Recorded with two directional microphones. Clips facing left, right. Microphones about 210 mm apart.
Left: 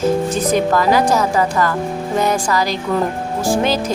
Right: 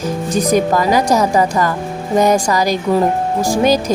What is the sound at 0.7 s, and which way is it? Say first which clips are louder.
Speech: right 1 dB; 15° right (ahead or behind).